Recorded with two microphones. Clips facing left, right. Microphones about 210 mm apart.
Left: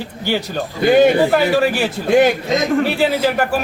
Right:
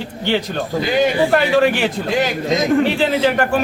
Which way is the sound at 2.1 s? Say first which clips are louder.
Left 9 dB; 50° left (ahead or behind).